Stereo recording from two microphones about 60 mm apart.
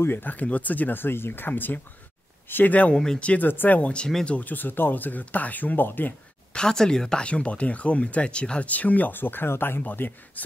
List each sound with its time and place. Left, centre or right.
0.0 s speech: left
2.9 s speech: centre
3.4 s speech: left; by 4.4 s centre
4.4 s speech: left
6.5 s speech: centre; by 10.4 s left